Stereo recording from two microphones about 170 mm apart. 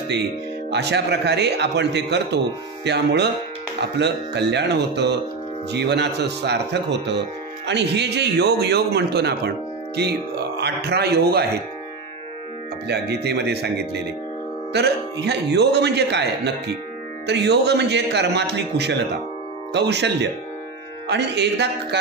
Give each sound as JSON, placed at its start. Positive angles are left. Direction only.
{"t": 0.7, "sound": "a man's voice", "side_deg": -80}
{"t": 12.8, "sound": "speech", "side_deg": -75}
{"t": 14.7, "sound": "a man's voice", "side_deg": -80}